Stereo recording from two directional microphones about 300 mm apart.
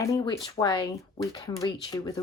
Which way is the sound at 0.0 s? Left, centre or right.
Centre.